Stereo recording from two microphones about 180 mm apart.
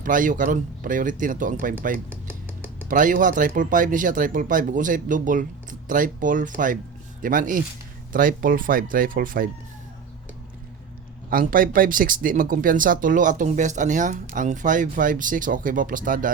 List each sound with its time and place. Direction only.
0.0 s speech: 50° right (ahead or behind)
11.3 s speech: 50° right (ahead or behind)